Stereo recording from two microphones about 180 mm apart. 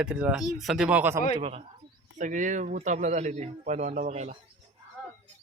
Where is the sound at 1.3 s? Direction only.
30° right (ahead or behind).